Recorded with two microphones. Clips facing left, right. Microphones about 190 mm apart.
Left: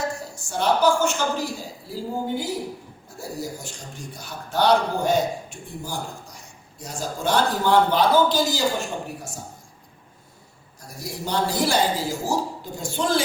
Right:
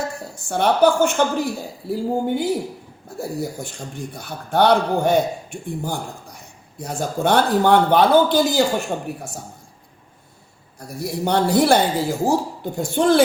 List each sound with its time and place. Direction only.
0.3 s a man's voice: 60° right (ahead or behind)
10.8 s a man's voice: 60° right (ahead or behind)